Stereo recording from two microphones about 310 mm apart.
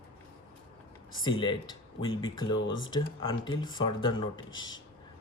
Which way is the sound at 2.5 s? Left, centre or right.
Left.